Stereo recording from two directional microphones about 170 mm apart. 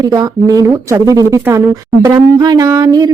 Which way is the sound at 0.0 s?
20° right (ahead or behind).